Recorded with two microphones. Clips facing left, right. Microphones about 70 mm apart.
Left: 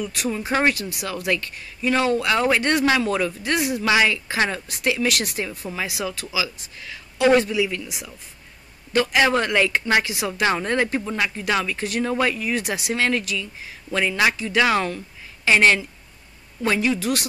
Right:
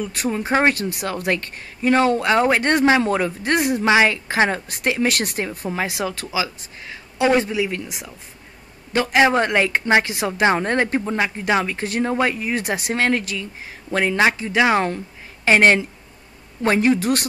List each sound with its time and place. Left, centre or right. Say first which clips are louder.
0.0 s speech: right 2 dB; right
0.5 s speech: right 3 dB; right
0.7 s speech: right 4 dB; right
3.8 s speech: right 2 dB; right
9.2 s speech: right 4 dB; right
15.4 s speech: right 2 dB; right